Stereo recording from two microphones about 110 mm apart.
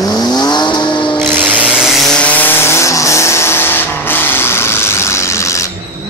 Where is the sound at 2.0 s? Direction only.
10° left (ahead or behind); by 5.6 s 25° left (ahead or behind).